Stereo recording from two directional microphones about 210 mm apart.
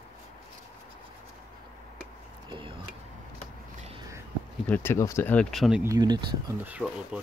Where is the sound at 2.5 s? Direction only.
25° right (ahead or behind).